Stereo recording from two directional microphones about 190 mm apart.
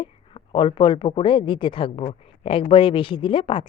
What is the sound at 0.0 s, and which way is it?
Speech, 25° left (ahead or behind).